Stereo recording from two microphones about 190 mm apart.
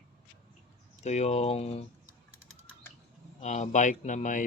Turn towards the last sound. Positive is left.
turn(degrees=40)  # may be behind; listen again after turning